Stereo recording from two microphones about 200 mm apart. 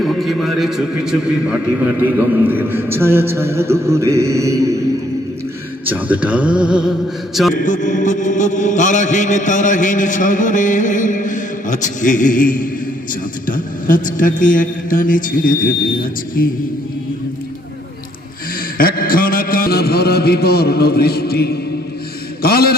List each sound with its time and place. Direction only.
0.0 s a man's voice: centre (ahead or behind); by 4.8 s 15° right (ahead or behind)
5.8 s a man's voice: 10° right (ahead or behind)
7.5 s mantra: 40° left (ahead or behind)
18.8 s a sound: 45° left (ahead or behind)
22.4 s a man's voice: 50° left (ahead or behind)